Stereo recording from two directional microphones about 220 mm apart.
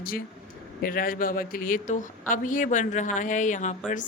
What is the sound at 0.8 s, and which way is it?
A woman's voice, 40° left (ahead or behind).